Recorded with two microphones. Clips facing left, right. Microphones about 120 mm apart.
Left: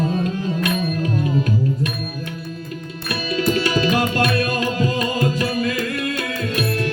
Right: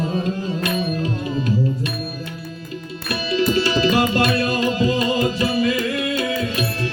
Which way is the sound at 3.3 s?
50° left (ahead or behind).